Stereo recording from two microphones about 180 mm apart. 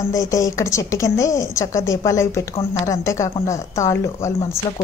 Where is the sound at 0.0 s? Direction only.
20° left (ahead or behind).